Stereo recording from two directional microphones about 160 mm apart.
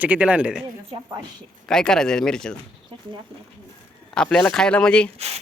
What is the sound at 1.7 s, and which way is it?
Speech, 5° left (ahead or behind).